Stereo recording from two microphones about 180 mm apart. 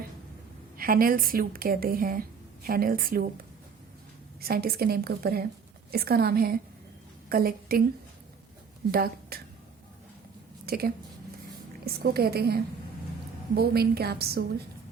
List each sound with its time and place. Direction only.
0.8 s a woman's voice: 55° right (ahead or behind)
4.4 s a woman's voice: 60° right (ahead or behind)
8.9 s a woman's voice: 55° right (ahead or behind)
10.7 s speech: 55° right (ahead or behind)
12.0 s a woman's voice: 60° right (ahead or behind)
13.6 s a woman's voice: 60° right (ahead or behind)